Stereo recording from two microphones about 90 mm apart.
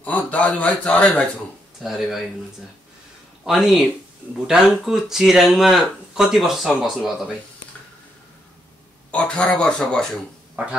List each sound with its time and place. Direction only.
0.0 s speech: 15° left (ahead or behind)
1.8 s speech: centre (ahead or behind)
3.4 s speech: centre (ahead or behind)
9.1 s speech: 10° left (ahead or behind)
10.5 s a sound: 15° right (ahead or behind)